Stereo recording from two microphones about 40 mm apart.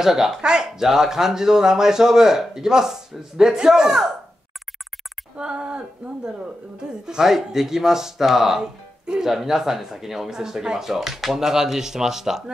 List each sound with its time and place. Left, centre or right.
0.0 s speech: centre
5.4 s speech: right